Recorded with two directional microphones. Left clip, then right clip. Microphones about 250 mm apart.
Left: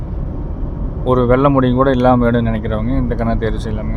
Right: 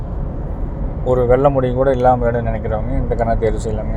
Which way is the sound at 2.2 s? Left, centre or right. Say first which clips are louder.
Left 2 dB; left.